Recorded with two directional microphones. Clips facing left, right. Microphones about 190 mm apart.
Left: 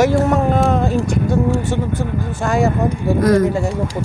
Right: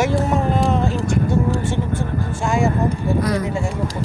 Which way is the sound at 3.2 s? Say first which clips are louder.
Left 8 dB; 45° left (ahead or behind).